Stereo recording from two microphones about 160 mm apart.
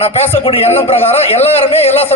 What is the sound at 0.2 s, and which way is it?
A man's voice, 40° left (ahead or behind).